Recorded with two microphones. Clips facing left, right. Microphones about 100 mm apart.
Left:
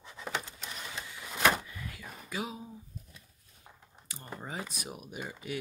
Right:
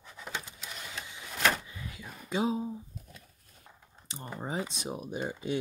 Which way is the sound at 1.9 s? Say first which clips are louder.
Right 7 dB; 25° right (ahead or behind).